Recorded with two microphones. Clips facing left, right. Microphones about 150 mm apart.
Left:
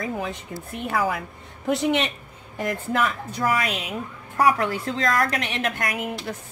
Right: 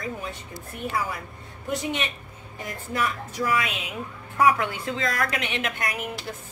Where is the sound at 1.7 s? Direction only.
90° left.